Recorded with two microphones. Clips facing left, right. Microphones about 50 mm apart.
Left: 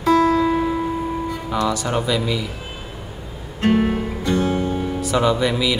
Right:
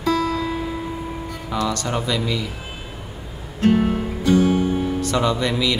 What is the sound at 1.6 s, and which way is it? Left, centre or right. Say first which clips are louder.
Speech: left 2 dB; centre.